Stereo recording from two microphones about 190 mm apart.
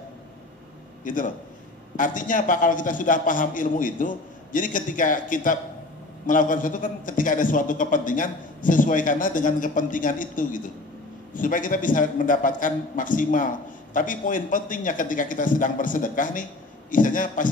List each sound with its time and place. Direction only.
1.0 s a man's voice: 45° left (ahead or behind)